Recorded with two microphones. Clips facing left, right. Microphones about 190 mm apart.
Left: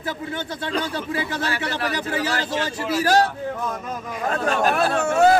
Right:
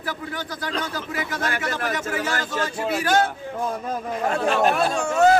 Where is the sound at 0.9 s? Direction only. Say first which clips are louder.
Left 3 dB; 30° left (ahead or behind).